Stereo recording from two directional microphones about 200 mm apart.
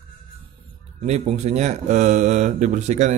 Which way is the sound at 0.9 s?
35° right (ahead or behind).